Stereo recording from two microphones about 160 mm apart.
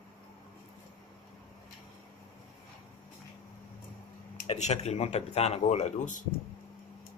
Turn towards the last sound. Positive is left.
turn(degrees=50)  # may be behind; listen again after turning